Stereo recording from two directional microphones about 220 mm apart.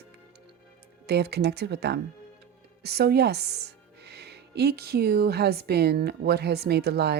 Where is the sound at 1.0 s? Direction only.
50° right (ahead or behind).